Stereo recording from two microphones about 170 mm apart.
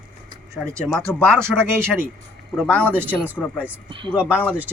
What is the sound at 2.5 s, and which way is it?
Speech, 5° left (ahead or behind).